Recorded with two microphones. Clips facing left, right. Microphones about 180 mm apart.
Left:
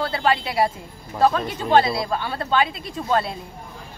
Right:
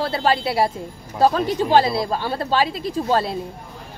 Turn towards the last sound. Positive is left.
turn(degrees=-35)  # may be behind; listen again after turning